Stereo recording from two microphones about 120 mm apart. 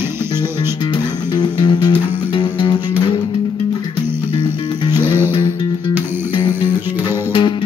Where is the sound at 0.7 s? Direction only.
40° left (ahead or behind).